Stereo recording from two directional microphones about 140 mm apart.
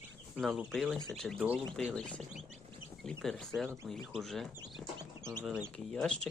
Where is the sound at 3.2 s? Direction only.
5° left (ahead or behind).